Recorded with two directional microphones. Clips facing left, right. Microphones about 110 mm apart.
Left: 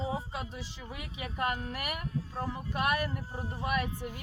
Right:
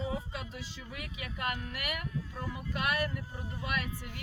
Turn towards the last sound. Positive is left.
turn(degrees=30)  # may be behind; listen again after turning